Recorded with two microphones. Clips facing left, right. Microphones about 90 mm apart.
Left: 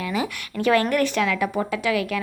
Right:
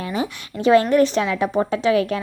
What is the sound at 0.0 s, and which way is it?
A woman's voice, 30° right (ahead or behind).